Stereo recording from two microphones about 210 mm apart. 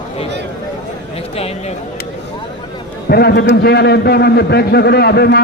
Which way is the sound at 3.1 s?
50° left (ahead or behind).